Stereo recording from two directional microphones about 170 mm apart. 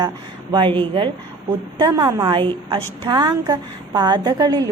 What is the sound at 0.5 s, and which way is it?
A woman's voice, 30° right (ahead or behind).